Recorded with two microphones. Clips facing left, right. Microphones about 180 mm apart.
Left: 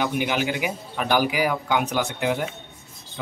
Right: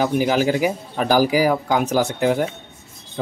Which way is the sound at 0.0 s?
35° right (ahead or behind).